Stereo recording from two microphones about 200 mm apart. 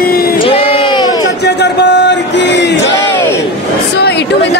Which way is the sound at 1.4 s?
55° left (ahead or behind).